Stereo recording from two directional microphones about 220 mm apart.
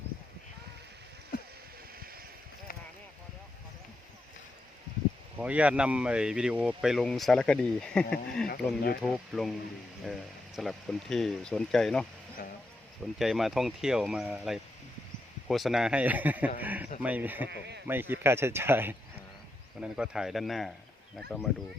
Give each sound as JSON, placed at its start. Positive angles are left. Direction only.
{"t": 5.4, "sound": "speech", "side_deg": -5}
{"t": 8.4, "sound": "speech", "side_deg": 45}
{"t": 9.0, "sound": "speech", "side_deg": 0}
{"t": 13.1, "sound": "speech", "side_deg": 0}
{"t": 17.5, "sound": "speech", "side_deg": -50}
{"t": 17.8, "sound": "speech", "side_deg": -10}